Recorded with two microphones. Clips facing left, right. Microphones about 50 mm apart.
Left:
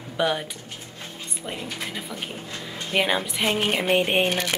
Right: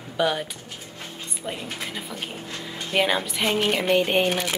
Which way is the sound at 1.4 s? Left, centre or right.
Centre.